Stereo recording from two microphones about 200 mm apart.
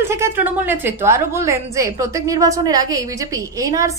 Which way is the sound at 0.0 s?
15° right (ahead or behind).